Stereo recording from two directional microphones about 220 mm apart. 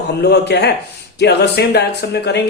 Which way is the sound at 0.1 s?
50° left (ahead or behind).